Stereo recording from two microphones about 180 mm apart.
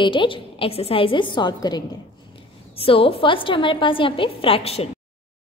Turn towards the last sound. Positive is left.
turn(degrees=35)  # may be behind; listen again after turning